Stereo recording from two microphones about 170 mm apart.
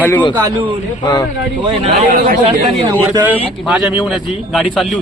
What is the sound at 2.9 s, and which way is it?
A man's voice, 10° right (ahead or behind).